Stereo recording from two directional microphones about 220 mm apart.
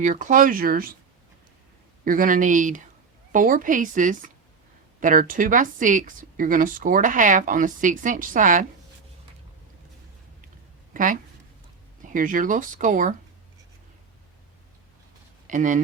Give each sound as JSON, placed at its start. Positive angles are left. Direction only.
{"t": 0.0, "sound": "speech", "side_deg": -35}
{"t": 2.0, "sound": "speech", "side_deg": -40}
{"t": 10.9, "sound": "speech", "side_deg": -35}
{"t": 15.4, "sound": "speech", "side_deg": -35}